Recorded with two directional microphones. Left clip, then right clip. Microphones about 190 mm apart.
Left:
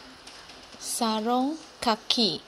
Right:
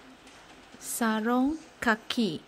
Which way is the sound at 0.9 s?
30° right (ahead or behind).